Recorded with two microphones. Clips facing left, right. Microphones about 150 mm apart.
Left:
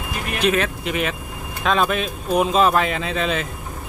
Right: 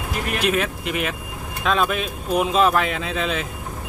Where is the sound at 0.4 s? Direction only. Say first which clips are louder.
Left 4 dB; 5° right (ahead or behind).